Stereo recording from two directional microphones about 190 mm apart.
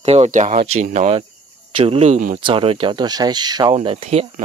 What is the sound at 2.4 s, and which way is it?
Speech, 25° right (ahead or behind).